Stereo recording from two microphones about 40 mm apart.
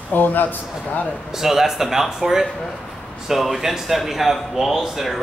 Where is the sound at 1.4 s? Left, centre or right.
Centre.